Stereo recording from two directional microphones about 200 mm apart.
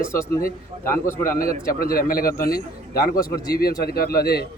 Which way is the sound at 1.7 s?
45° left (ahead or behind).